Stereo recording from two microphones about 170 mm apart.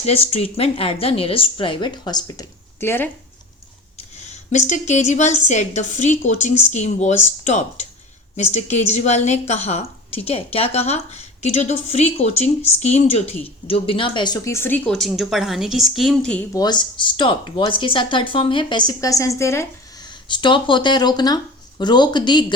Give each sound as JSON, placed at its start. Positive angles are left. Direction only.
{"t": 0.0, "sound": "a woman's voice", "side_deg": 35}
{"t": 4.3, "sound": "a woman's voice", "side_deg": 45}
{"t": 16.6, "sound": "speech", "side_deg": 25}